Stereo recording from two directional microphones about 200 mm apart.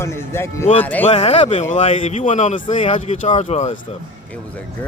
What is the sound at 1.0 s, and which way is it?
Speech, 30° left (ahead or behind).